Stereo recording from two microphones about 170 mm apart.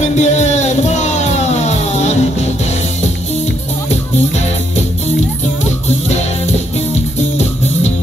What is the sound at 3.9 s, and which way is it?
Music, 40° left (ahead or behind).